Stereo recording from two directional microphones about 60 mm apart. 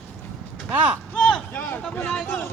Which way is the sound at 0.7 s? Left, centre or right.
Right.